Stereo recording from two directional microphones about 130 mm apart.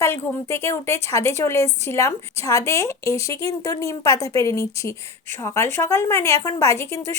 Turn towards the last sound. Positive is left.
turn(degrees=20)  # may be behind; listen again after turning